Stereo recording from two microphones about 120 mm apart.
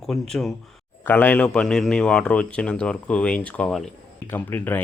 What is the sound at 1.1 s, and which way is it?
Speech, 15° left (ahead or behind).